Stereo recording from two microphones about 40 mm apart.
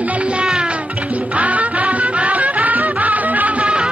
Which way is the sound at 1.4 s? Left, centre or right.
Right.